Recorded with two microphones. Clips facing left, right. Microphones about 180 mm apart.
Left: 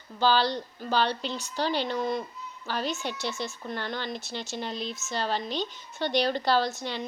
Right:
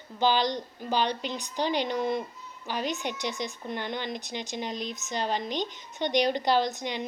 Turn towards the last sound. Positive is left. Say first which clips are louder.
# even
turn(degrees=-15)  # may be behind; listen again after turning